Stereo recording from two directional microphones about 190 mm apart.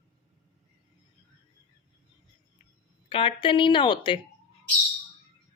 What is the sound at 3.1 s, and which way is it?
A woman's voice, 30° left (ahead or behind).